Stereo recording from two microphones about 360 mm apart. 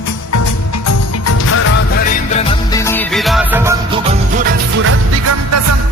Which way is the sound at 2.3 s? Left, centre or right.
Centre.